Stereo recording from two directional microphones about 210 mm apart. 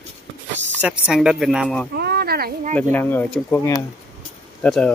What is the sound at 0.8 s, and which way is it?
Speech, 5° right (ahead or behind).